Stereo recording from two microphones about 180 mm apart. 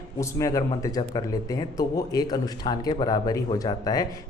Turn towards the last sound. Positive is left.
turn(degrees=20)  # may be behind; listen again after turning